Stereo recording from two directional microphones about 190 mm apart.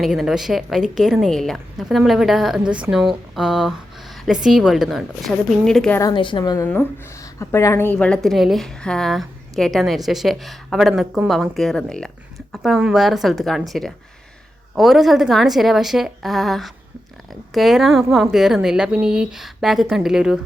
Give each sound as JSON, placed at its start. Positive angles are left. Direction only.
{"t": 0.0, "sound": "speech", "side_deg": 0}
{"t": 6.0, "sound": "a woman's voice", "side_deg": 25}